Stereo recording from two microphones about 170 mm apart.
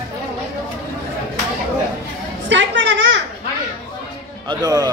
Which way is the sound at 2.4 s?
90° right.